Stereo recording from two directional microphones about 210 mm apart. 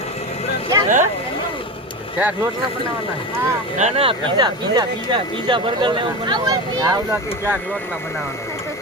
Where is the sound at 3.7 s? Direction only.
30° right (ahead or behind).